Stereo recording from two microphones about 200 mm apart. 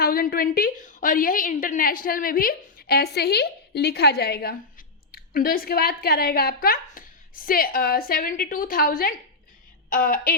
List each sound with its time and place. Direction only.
0.0 s a woman's voice: 45° left (ahead or behind)